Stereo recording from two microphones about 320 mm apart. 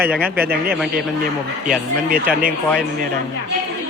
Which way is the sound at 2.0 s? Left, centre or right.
Right.